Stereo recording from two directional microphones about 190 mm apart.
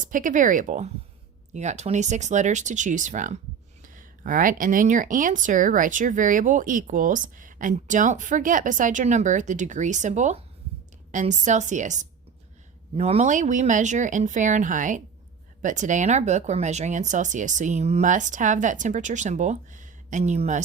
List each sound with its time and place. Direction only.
0.0 s speech: 45° right (ahead or behind)